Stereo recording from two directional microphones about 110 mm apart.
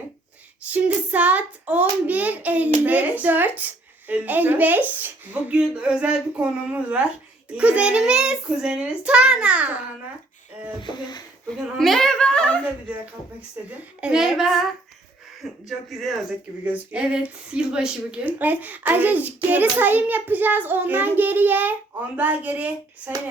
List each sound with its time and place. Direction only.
0.6 s a woman's voice: 15° right (ahead or behind)
10.8 s speech: 45° left (ahead or behind)
11.8 s a child's voice: 5° left (ahead or behind)
13.7 s speech: 10° right (ahead or behind)
16.6 s a woman's voice: 10° right (ahead or behind)